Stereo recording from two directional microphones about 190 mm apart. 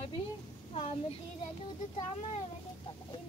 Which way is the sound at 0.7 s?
30° left (ahead or behind).